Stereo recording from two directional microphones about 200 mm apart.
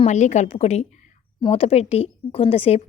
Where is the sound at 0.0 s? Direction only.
35° left (ahead or behind).